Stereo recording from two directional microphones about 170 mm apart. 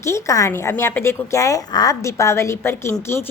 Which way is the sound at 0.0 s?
20° left (ahead or behind).